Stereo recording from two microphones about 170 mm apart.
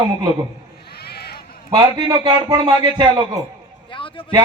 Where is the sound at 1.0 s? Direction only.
70° left (ahead or behind).